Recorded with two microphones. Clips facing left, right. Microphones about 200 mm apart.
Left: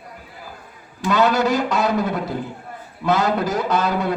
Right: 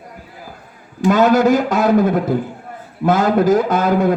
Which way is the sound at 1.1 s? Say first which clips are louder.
Right 6 dB; 50° right (ahead or behind).